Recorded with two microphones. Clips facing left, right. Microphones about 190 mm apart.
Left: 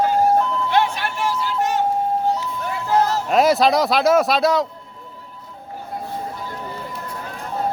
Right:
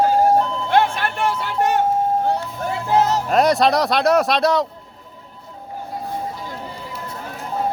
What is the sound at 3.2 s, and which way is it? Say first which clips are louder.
Speech: even; centre (ahead or behind).